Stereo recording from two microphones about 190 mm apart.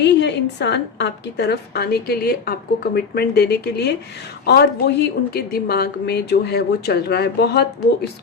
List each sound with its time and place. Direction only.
0.0 s a woman's voice: 65° left (ahead or behind)